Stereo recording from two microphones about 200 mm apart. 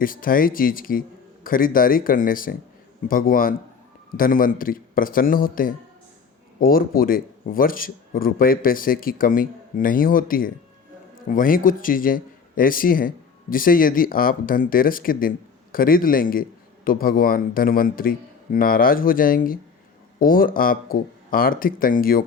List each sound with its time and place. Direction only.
0.0 s speech: 45° left (ahead or behind)